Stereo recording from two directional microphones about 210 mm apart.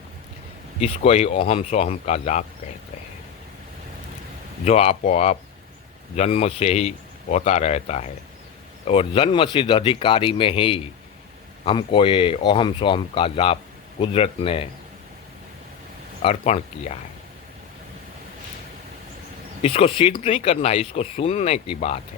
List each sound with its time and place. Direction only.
0.8 s speech: 30° left (ahead or behind)
4.6 s speech: 30° left (ahead or behind)
16.2 s speech: 30° left (ahead or behind)
19.6 s speech: 25° left (ahead or behind)